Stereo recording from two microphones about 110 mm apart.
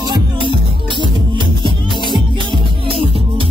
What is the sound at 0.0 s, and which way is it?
Music, 50° right (ahead or behind).